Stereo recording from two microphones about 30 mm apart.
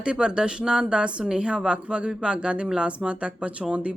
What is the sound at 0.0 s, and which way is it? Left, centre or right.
A woman's voice, right.